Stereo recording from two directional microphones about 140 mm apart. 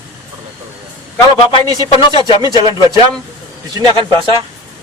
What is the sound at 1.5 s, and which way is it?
Speech, 35° left (ahead or behind).